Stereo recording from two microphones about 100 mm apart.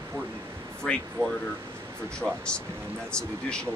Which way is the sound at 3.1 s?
10° left (ahead or behind).